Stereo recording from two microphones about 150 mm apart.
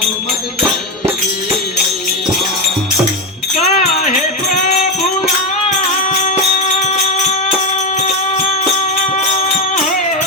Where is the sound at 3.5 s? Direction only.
55° left (ahead or behind).